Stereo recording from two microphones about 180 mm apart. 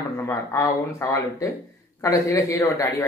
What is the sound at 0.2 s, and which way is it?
Speech, 15° left (ahead or behind).